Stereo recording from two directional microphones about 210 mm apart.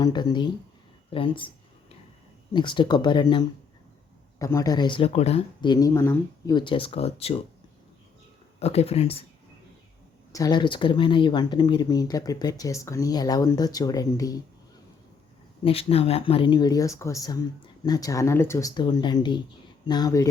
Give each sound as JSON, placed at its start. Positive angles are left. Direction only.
{"t": 0.0, "sound": "speech", "side_deg": 20}
{"t": 2.5, "sound": "speech", "side_deg": 20}
{"t": 8.5, "sound": "speech", "side_deg": 30}
{"t": 10.3, "sound": "speech", "side_deg": 20}
{"t": 15.6, "sound": "speech", "side_deg": 30}